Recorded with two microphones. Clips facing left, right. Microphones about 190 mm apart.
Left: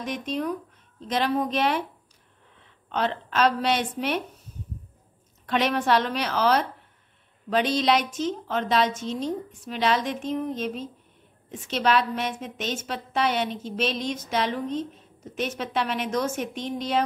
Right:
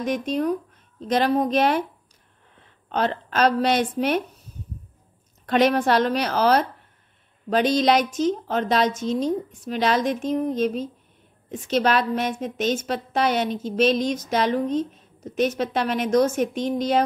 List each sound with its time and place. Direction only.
0.0 s a woman's voice: 45° right (ahead or behind)
2.9 s a woman's voice: 40° right (ahead or behind)
5.5 s a woman's voice: 40° right (ahead or behind)